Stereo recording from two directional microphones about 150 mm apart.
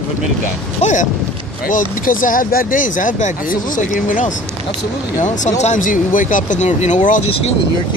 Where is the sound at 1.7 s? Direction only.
65° left (ahead or behind).